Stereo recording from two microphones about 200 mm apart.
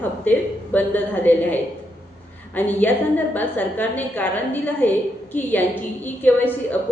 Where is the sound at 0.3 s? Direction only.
10° left (ahead or behind).